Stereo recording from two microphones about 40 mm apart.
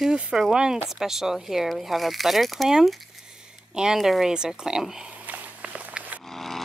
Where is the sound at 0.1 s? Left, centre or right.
Centre.